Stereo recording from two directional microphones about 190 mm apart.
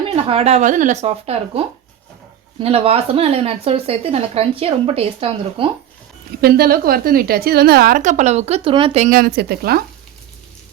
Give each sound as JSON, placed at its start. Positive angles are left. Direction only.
{"t": 0.0, "sound": "speech", "side_deg": -30}
{"t": 6.4, "sound": "a woman's voice", "side_deg": -50}
{"t": 9.0, "sound": "speech", "side_deg": -55}